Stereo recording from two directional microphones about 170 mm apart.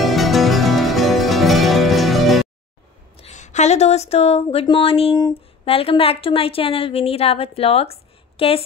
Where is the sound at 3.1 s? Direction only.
40° left (ahead or behind).